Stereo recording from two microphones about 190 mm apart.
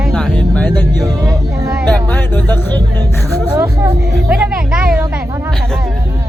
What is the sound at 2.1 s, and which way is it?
Speech, 10° left (ahead or behind).